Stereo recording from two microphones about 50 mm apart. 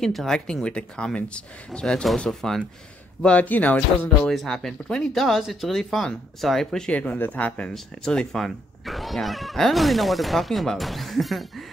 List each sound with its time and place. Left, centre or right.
0.0 s speech: centre
0.5 s speech: centre
3.3 s speech: left
4.3 s speech: centre
6.9 s speech: left
7.7 s speech: centre